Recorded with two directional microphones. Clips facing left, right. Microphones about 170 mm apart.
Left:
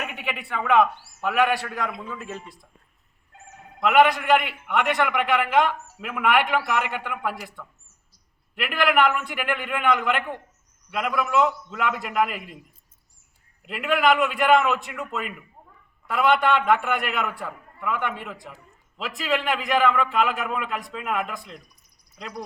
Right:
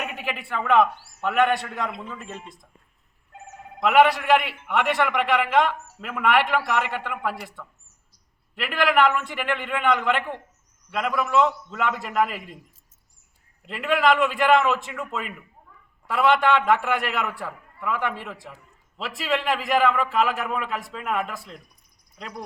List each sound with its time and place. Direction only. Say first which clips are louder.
0.0 s a man's voice: right 1 dB; centre (ahead or behind)
3.8 s a man's voice: even; centre (ahead or behind)
13.7 s a man's voice: even; centre (ahead or behind)